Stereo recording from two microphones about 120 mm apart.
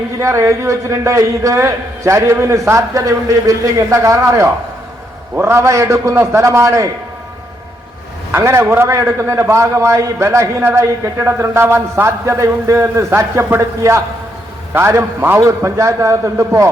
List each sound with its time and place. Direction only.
0.2 s a man's voice: 25° right (ahead or behind)
8.3 s a man's voice: 20° right (ahead or behind)